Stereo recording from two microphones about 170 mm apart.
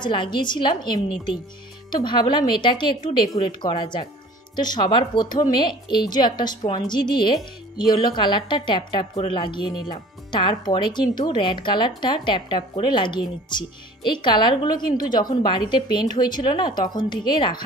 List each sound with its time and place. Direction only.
0.0 s speech: 25° left (ahead or behind)